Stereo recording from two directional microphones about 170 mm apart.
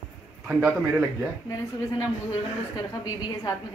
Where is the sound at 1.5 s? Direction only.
20° left (ahead or behind).